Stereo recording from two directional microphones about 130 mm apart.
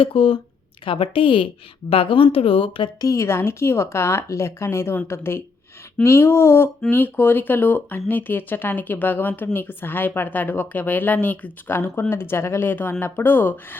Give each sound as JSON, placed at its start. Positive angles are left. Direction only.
{"t": 0.0, "sound": "a woman's voice", "side_deg": 45}
{"t": 3.0, "sound": "a woman's voice", "side_deg": 25}